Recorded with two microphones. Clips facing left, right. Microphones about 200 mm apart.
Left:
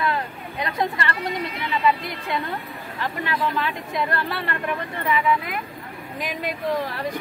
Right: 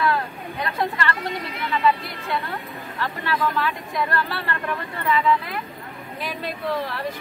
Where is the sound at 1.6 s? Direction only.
15° left (ahead or behind).